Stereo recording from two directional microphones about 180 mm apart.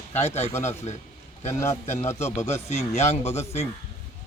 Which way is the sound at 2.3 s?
35° left (ahead or behind).